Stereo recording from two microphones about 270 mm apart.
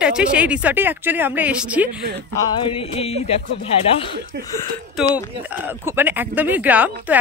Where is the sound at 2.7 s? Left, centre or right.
Left.